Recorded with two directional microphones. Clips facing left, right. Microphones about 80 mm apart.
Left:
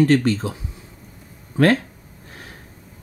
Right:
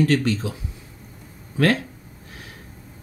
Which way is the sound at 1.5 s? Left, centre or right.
Left.